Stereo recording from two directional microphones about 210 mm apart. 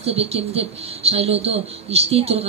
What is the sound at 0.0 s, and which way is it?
A woman's voice, 30° right (ahead or behind).